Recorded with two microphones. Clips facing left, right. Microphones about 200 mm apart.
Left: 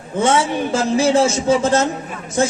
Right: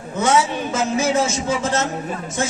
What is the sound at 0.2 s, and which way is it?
A man's voice, 25° left (ahead or behind).